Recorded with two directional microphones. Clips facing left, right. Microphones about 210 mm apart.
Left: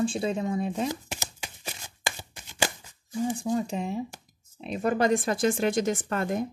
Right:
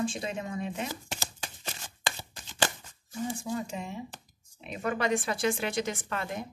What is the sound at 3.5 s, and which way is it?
Speech, 35° left (ahead or behind).